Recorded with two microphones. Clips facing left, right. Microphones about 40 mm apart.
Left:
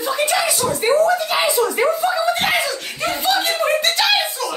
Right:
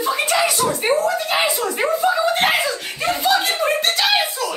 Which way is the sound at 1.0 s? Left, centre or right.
Right.